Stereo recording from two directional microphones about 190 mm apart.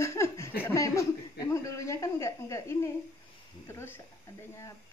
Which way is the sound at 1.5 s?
15° left (ahead or behind).